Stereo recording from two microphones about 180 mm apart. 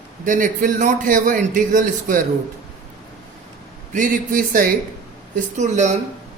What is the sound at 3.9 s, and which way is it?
Speech, 45° right (ahead or behind).